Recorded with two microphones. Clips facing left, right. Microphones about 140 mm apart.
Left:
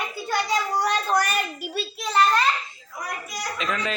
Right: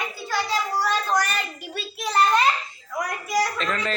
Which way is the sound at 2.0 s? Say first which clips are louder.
Right 1 dB; 10° right (ahead or behind).